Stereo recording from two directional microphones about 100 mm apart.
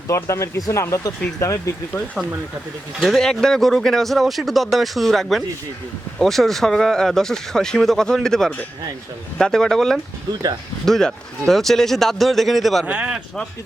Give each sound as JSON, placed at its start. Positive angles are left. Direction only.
{"t": 0.1, "sound": "speech", "side_deg": 30}
{"t": 3.0, "sound": "speech", "side_deg": 5}
{"t": 12.8, "sound": "speech", "side_deg": -10}